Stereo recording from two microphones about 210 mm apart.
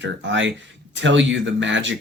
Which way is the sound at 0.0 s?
60° right (ahead or behind).